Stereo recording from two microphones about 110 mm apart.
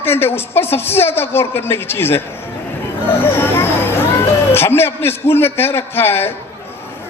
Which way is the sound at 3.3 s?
20° left (ahead or behind).